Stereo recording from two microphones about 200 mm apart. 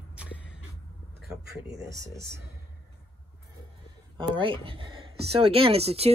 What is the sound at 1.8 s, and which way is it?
Speech, 15° right (ahead or behind).